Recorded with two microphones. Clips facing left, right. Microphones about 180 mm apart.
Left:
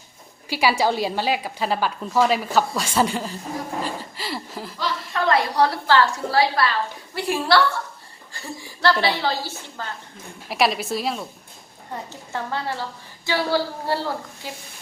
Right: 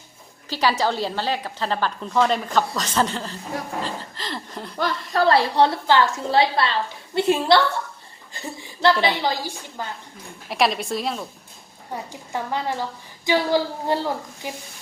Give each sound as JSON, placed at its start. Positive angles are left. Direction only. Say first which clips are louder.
{"t": 0.5, "sound": "a woman's voice", "louder": "left 1 dB", "side_deg": 10}
{"t": 5.1, "sound": "a woman's voice", "louder": "right 3 dB", "side_deg": -35}
{"t": 10.5, "sound": "a woman's voice", "louder": "even", "side_deg": 0}
{"t": 11.9, "sound": "a woman's voice", "louder": "right 1 dB", "side_deg": -10}